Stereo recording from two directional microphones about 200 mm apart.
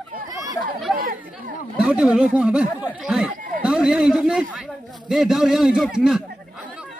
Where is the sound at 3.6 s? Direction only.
5° right (ahead or behind).